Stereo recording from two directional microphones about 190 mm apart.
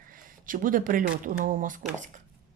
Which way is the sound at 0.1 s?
45° right (ahead or behind).